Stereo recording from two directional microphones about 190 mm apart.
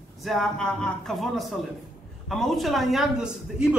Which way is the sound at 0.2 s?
Centre (ahead or behind).